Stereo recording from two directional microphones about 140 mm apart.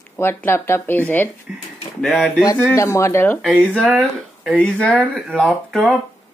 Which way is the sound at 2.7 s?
20° left (ahead or behind).